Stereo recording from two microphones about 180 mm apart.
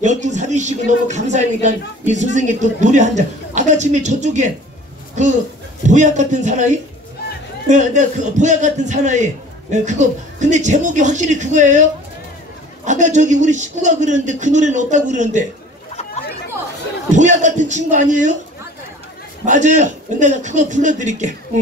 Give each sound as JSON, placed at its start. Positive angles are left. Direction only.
{"t": 0.0, "sound": "speech", "side_deg": -40}
{"t": 5.9, "sound": "speech", "side_deg": -40}
{"t": 17.1, "sound": "a man's voice", "side_deg": -40}
{"t": 19.4, "sound": "speech", "side_deg": -40}